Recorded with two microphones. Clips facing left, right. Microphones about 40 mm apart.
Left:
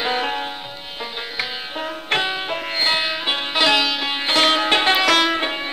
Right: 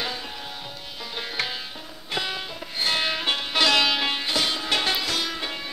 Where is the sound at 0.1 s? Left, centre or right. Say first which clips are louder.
Left 12 dB; left.